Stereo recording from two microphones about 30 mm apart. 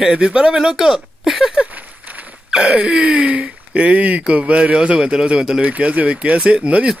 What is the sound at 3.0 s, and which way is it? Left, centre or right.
Speech, right.